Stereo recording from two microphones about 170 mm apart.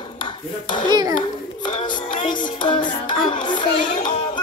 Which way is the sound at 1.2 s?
30° left (ahead or behind).